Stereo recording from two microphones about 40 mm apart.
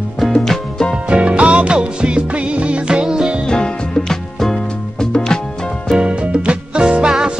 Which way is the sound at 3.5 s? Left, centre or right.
Centre.